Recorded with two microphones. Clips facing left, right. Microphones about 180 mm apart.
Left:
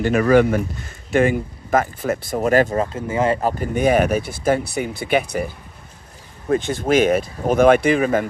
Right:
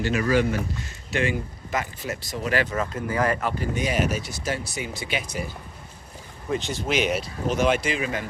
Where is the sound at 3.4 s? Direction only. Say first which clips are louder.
Left 8 dB; 50° left (ahead or behind).